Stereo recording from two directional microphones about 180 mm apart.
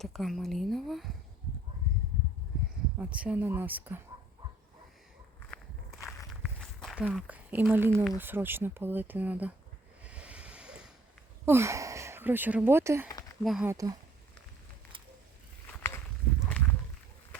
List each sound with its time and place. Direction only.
0.0 s a woman's voice: centre (ahead or behind)
3.2 s speech: 10° right (ahead or behind)
6.6 s walk: 5° left (ahead or behind)
7.0 s speech: 5° right (ahead or behind)
10.0 s a sound: 5° right (ahead or behind)
11.4 s speech: 15° right (ahead or behind)
13.4 s a woman's voice: centre (ahead or behind)
13.7 s speech: 20° right (ahead or behind)
15.7 s walk: 15° left (ahead or behind)
16.5 s a sound: 10° left (ahead or behind)